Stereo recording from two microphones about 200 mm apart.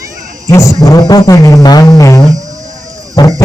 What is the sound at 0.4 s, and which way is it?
Speech, 15° left (ahead or behind).